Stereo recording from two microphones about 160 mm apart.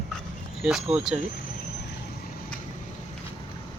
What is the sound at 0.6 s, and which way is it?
Speech, 5° right (ahead or behind).